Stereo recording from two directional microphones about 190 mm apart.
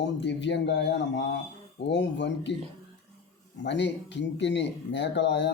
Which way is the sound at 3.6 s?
65° left (ahead or behind).